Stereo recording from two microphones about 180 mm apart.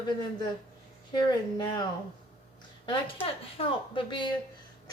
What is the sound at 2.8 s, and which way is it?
Speech, 30° left (ahead or behind).